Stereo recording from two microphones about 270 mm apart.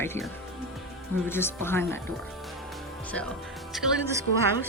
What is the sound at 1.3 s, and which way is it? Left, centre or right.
Speech, centre.